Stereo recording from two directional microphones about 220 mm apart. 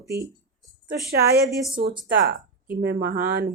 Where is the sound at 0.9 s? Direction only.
45° right (ahead or behind).